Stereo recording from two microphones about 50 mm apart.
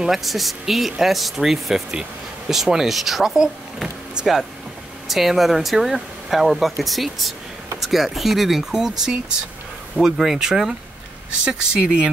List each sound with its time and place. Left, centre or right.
0.0 s speech: centre